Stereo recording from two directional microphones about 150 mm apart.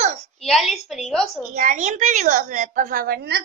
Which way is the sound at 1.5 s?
55° right (ahead or behind).